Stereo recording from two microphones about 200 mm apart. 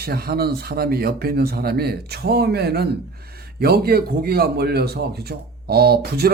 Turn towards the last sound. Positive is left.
turn(degrees=-50)  # may be behind; listen again after turning